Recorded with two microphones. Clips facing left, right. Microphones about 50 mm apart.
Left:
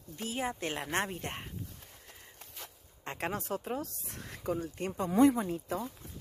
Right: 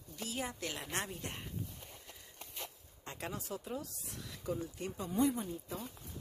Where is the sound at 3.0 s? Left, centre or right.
Left.